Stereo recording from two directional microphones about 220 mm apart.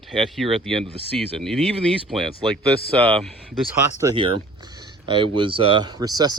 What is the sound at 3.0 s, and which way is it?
Speech, 25° right (ahead or behind).